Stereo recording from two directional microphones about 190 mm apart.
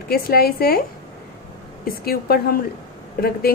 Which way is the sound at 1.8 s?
50° left (ahead or behind).